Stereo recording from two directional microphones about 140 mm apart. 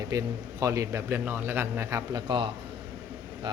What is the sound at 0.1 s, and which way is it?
A man's voice, 25° right (ahead or behind).